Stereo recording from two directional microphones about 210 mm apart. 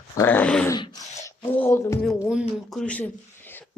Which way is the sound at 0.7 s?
20° left (ahead or behind).